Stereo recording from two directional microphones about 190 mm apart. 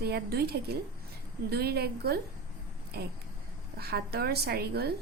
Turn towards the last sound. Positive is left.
turn(degrees=-55)  # may be behind; listen again after turning